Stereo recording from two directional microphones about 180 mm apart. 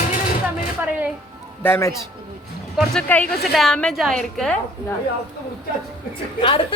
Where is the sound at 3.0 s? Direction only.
10° left (ahead or behind).